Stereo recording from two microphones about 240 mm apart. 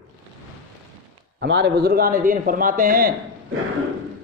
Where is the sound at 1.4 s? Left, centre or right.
Right.